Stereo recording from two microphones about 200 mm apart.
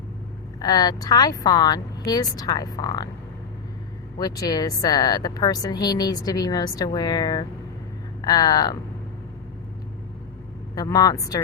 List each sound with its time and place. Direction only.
0.6 s speech: 20° left (ahead or behind)
4.2 s speech: 20° left (ahead or behind)
10.8 s speech: 20° left (ahead or behind)